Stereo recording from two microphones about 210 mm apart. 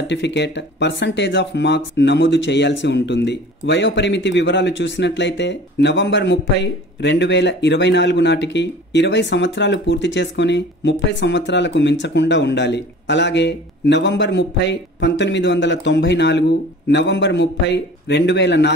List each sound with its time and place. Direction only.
0.1 s speech: 55° left (ahead or behind)